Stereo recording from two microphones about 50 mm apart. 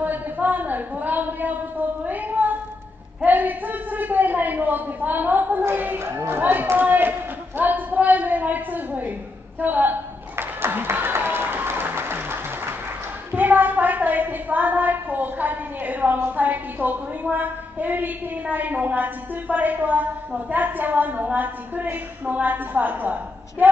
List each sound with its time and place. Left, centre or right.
0.0 s a sound: right
3.3 s a woman's voice: right
5.9 s a woman's voice: right
9.6 s a sound: right
10.6 s applause: right
13.3 s a woman's voice: right